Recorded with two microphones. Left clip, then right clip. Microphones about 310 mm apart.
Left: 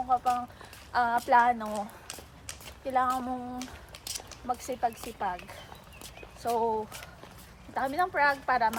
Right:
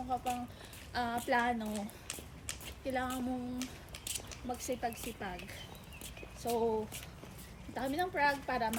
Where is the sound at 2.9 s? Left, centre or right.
Left.